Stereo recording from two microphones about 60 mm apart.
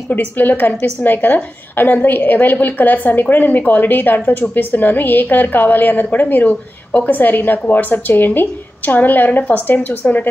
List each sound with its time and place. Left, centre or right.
0.1 s a woman's voice: left